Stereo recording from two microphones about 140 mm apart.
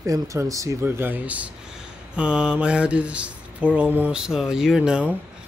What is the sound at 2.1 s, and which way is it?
Speech, 5° right (ahead or behind).